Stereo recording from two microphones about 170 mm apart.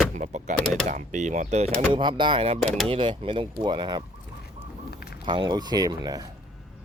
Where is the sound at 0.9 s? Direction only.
45° right (ahead or behind).